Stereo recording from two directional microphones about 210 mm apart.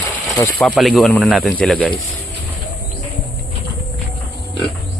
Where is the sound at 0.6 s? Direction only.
Centre (ahead or behind).